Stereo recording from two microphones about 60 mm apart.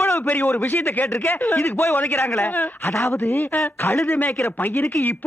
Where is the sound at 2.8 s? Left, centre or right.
Left.